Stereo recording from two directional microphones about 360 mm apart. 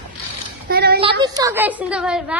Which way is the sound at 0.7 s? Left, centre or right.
Right.